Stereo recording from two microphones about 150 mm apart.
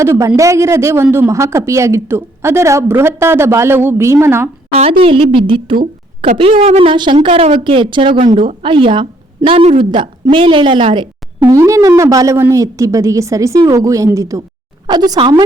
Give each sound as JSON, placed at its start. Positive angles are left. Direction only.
{"t": 0.0, "sound": "speech", "side_deg": -20}
{"t": 4.7, "sound": "a woman's voice", "side_deg": -40}
{"t": 11.5, "sound": "a woman's voice", "side_deg": -20}